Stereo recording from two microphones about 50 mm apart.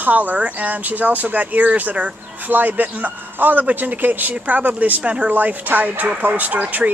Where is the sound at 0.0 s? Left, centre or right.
Right.